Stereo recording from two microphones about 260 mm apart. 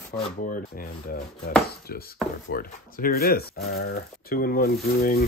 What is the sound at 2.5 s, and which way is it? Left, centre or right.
Speech, left.